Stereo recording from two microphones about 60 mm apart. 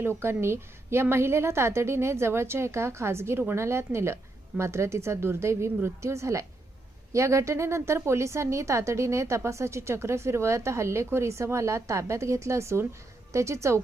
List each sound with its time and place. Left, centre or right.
0.0 s a woman's voice: right